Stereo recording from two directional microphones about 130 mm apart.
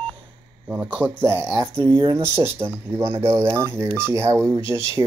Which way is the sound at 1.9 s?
30° right (ahead or behind).